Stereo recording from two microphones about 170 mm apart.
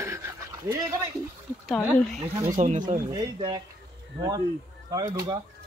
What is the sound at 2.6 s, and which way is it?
Speech, 40° right (ahead or behind).